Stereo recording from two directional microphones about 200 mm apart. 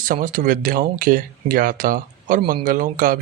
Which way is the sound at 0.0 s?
40° right (ahead or behind).